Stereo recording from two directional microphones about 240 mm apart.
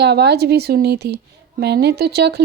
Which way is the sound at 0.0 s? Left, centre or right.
Right.